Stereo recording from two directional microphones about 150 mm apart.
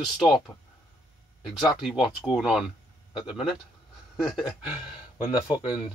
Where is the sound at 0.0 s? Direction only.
Centre (ahead or behind).